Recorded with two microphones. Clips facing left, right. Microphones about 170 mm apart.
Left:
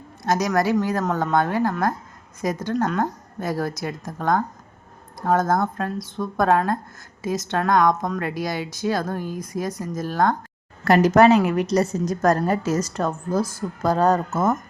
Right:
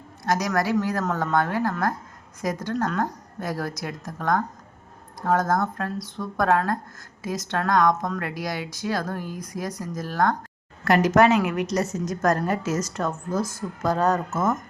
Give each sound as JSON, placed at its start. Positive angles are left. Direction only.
{"t": 0.3, "sound": "a woman's voice", "side_deg": 25}